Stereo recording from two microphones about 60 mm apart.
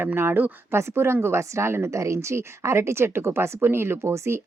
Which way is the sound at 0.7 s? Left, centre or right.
Right.